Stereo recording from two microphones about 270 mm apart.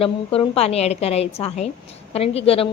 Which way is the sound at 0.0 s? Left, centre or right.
Left.